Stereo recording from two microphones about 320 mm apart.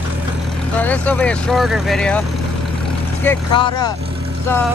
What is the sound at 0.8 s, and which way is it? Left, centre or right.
Speech, centre.